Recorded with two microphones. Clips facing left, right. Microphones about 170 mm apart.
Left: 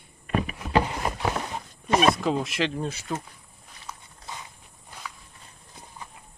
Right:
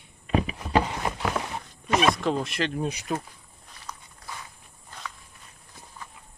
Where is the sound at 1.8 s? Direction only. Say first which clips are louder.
Left 2 dB; 35° left (ahead or behind).